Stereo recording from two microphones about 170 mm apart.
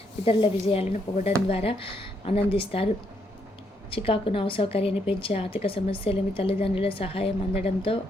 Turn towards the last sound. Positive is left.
turn(degrees=35)  # may be behind; listen again after turning